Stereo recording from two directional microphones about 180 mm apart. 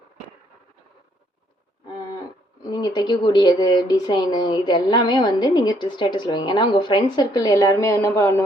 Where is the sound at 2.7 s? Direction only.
25° left (ahead or behind).